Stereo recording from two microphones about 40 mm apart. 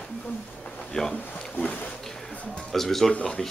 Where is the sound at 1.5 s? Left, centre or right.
Left.